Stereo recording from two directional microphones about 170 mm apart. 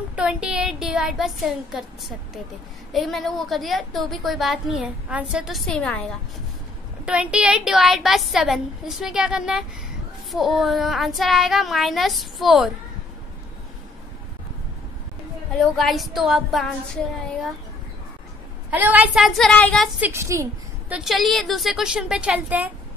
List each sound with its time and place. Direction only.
0.1 s a woman's voice: 5° right (ahead or behind)
7.1 s a woman's voice: 5° right (ahead or behind)
15.5 s a woman's voice: centre (ahead or behind)
18.7 s a woman's voice: 10° right (ahead or behind); by 19.9 s 5° left (ahead or behind)
20.0 s a woman's voice: 15° right (ahead or behind)
20.9 s a woman's voice: centre (ahead or behind)